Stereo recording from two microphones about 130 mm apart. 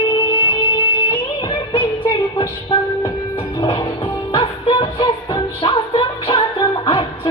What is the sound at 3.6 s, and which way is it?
Music, 40° left (ahead or behind).